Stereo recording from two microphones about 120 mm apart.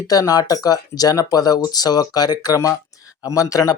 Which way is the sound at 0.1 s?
30° left (ahead or behind).